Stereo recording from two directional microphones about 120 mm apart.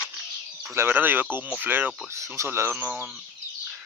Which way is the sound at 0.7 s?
15° right (ahead or behind).